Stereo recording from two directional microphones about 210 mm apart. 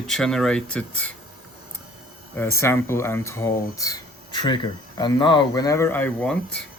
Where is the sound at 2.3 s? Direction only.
10° left (ahead or behind).